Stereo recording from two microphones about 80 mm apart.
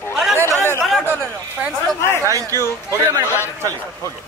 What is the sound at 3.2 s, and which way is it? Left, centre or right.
Speech, left.